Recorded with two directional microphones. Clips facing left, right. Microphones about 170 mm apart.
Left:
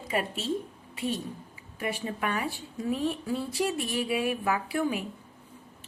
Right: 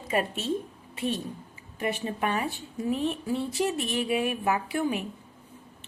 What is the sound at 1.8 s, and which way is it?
Speech, 25° right (ahead or behind).